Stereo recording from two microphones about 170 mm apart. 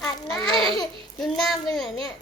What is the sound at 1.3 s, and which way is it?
Speech, centre (ahead or behind).